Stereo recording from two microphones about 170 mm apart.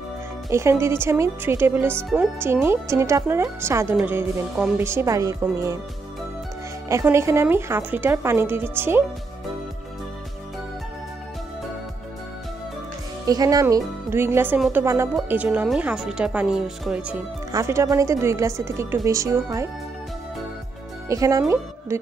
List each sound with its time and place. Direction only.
0.5 s speech: 15° right (ahead or behind)
6.9 s speech: 15° right (ahead or behind)
13.3 s speech: 20° right (ahead or behind); by 17.2 s 5° right (ahead or behind)
17.5 s speech: 20° right (ahead or behind)
21.1 s speech: 20° right (ahead or behind)